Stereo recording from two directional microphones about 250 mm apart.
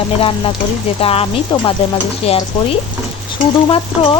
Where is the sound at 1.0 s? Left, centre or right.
Left.